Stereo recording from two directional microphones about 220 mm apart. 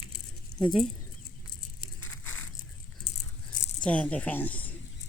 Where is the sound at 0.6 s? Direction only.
Centre (ahead or behind).